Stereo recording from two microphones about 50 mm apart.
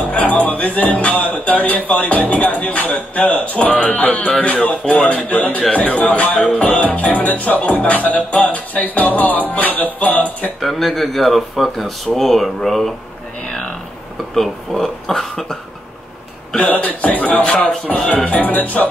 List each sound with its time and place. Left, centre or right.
0.1 s speech: left
10.6 s speech: centre
14.3 s speech: centre
16.5 s speech: left
17.4 s speech: centre
18.1 s speech: left